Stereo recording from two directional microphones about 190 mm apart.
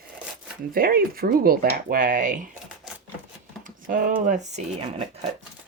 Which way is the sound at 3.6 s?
45° right (ahead or behind).